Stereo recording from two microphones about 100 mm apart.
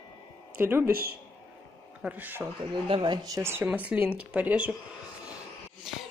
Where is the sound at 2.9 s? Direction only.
55° right (ahead or behind).